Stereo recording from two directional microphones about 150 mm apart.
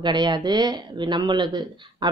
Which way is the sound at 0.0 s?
30° right (ahead or behind).